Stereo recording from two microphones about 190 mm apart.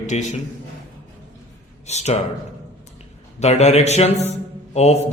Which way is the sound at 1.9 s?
35° left (ahead or behind).